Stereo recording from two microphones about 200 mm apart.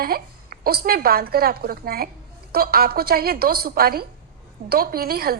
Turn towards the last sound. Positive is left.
turn(degrees=-50)  # may be behind; listen again after turning